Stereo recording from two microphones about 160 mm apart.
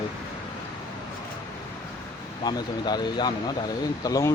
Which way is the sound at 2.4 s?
25° left (ahead or behind).